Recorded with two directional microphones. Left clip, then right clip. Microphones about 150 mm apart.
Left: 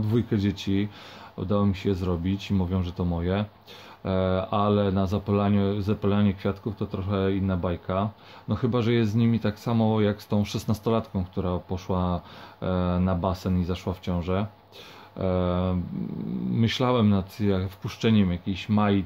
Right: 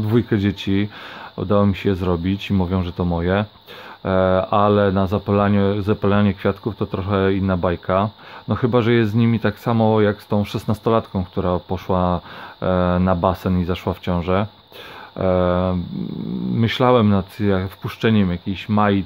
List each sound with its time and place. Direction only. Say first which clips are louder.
0.0 s speech: right 7 dB; 50° right (ahead or behind)